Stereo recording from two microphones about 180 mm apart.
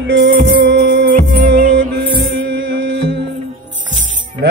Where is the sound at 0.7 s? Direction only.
80° right.